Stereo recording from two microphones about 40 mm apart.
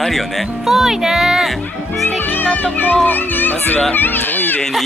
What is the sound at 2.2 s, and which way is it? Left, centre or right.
A child's voice, left.